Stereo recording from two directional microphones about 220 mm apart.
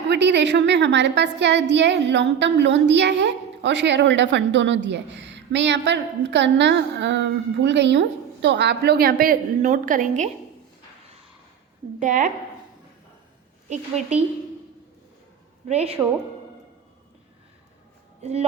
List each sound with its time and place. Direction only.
0.1 s a woman's voice: 50° right (ahead or behind)
11.9 s a woman's voice: 35° right (ahead or behind)
13.7 s a woman's voice: 30° right (ahead or behind)
15.6 s a woman's voice: 30° right (ahead or behind)
18.2 s speech: 30° right (ahead or behind)